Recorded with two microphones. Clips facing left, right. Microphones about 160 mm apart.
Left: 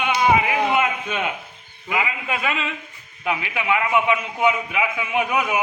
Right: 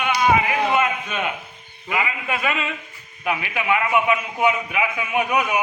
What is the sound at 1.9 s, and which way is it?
A man's voice, 15° left (ahead or behind).